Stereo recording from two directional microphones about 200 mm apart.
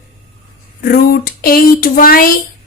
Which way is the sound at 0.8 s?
50° left (ahead or behind).